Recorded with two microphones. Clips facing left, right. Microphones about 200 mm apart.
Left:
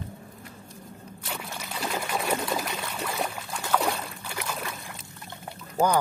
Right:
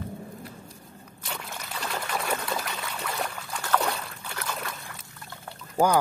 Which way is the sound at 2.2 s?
10° left (ahead or behind).